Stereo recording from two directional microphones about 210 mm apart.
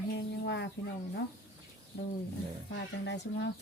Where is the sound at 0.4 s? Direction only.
55° left (ahead or behind).